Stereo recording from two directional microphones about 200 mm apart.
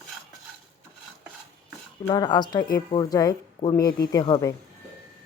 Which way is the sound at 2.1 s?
20° left (ahead or behind).